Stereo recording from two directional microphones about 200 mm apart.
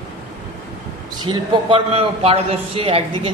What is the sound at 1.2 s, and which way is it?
A man's voice, 25° right (ahead or behind).